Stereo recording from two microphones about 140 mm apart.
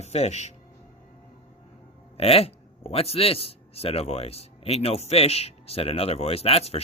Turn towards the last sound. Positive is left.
turn(degrees=45)  # may be behind; listen again after turning